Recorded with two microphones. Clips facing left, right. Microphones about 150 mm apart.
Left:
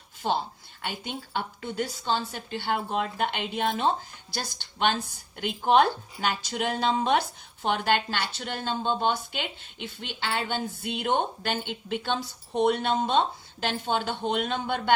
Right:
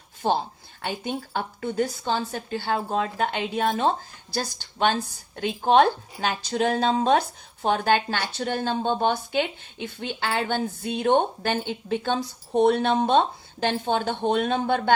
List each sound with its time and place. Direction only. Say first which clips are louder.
0.2 s speech: right 4 dB; 45° right (ahead or behind)
12.7 s speech: right 4 dB; 55° right (ahead or behind)